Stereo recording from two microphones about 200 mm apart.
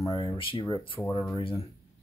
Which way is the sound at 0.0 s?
20° left (ahead or behind).